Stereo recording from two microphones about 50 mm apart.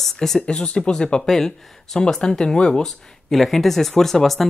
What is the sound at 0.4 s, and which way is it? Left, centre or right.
Speech, centre.